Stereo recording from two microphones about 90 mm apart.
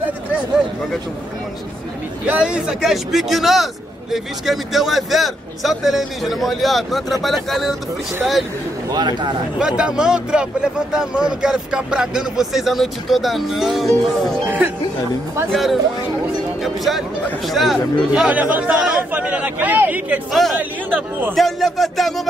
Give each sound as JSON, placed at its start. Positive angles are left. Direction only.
{"t": 2.2, "sound": "a man's voice", "side_deg": -15}
{"t": 8.9, "sound": "speech", "side_deg": -50}
{"t": 9.6, "sound": "a man's voice", "side_deg": -10}
{"t": 15.5, "sound": "a man's voice", "side_deg": 0}
{"t": 18.3, "sound": "a man's voice", "side_deg": -15}
{"t": 21.4, "sound": "speech", "side_deg": 0}